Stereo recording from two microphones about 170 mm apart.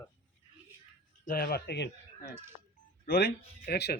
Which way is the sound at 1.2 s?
60° left (ahead or behind).